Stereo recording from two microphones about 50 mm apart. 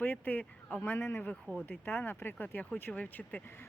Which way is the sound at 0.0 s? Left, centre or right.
Left.